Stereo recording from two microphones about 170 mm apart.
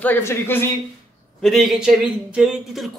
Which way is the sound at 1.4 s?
Centre (ahead or behind).